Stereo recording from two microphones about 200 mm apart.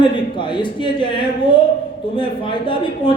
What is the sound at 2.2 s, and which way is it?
Speech, 25° left (ahead or behind).